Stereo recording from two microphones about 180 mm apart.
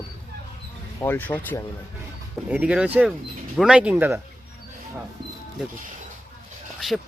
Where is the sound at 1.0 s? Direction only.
10° left (ahead or behind).